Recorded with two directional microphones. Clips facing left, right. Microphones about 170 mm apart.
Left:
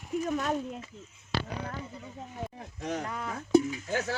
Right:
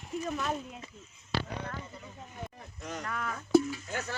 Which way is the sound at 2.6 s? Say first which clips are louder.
Left 8 dB; 75° left (ahead or behind).